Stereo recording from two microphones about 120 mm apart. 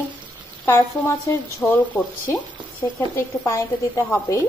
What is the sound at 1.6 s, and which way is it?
Speech, 20° left (ahead or behind).